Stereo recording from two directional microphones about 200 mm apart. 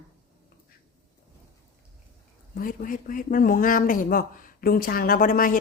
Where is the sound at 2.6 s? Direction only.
45° left (ahead or behind).